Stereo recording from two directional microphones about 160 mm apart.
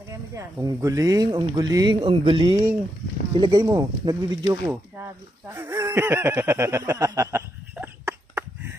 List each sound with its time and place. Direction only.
0.1 s speech: 20° right (ahead or behind)